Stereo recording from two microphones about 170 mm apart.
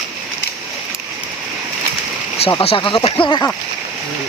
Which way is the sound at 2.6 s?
30° left (ahead or behind).